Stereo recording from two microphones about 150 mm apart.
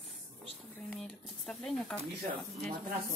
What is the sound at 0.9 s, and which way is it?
Speech, 5° left (ahead or behind).